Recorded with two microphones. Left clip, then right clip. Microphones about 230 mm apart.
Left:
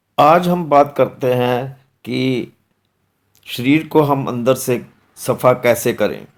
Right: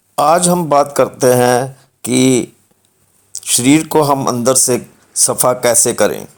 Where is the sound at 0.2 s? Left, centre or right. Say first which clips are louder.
Even; right.